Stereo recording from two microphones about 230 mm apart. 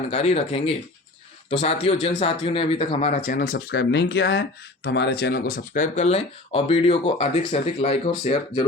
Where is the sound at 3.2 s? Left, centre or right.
Left.